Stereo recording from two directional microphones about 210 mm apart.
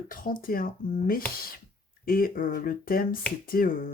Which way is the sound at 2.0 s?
45° left (ahead or behind).